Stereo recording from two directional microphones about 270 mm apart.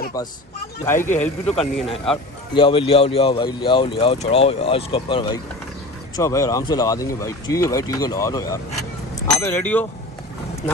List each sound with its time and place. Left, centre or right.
0.9 s speech: left; by 9.8 s centre